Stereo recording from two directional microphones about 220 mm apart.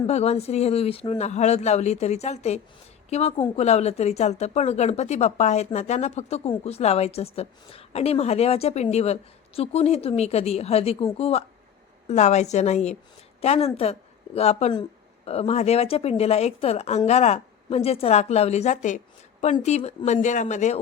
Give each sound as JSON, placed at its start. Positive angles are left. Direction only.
{"t": 0.1, "sound": "a woman's voice", "side_deg": 30}